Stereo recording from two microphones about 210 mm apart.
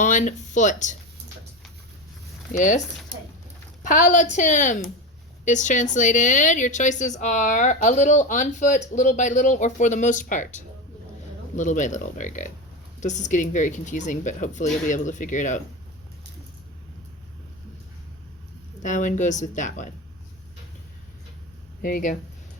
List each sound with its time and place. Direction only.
0.0 s a woman's voice: 35° left (ahead or behind)
2.5 s a woman's voice: 35° left (ahead or behind)
3.8 s a woman's voice: 35° left (ahead or behind)
18.8 s a woman's voice: 35° left (ahead or behind)
21.8 s speech: 40° left (ahead or behind)